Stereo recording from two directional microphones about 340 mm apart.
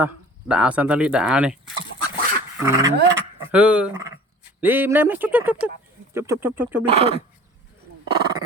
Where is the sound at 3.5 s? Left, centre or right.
Centre.